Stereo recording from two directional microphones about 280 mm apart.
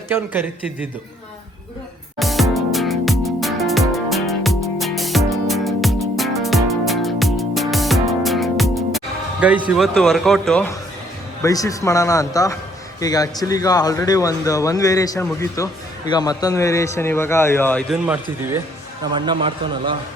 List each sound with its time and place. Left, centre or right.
0.1 s a man's voice: centre
2.1 s music: centre
9.4 s a man's voice: centre